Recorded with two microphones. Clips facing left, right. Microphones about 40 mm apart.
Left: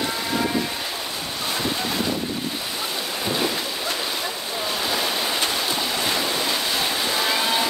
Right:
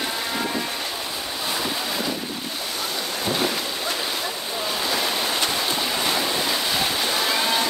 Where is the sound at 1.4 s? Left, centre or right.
Centre.